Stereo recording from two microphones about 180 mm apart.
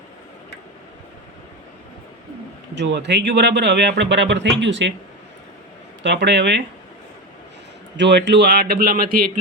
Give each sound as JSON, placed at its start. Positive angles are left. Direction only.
{"t": 2.7, "sound": "speech", "side_deg": -75}
{"t": 6.0, "sound": "speech", "side_deg": -80}
{"t": 7.9, "sound": "speech", "side_deg": -75}